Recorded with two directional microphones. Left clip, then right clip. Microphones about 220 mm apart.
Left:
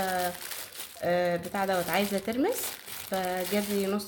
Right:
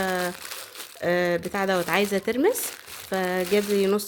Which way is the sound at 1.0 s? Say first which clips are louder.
Right 4 dB; 50° right (ahead or behind).